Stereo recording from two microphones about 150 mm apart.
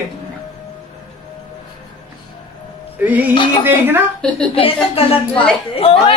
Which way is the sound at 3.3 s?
35° left (ahead or behind).